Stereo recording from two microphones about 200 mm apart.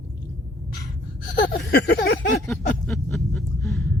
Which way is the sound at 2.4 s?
Centre (ahead or behind).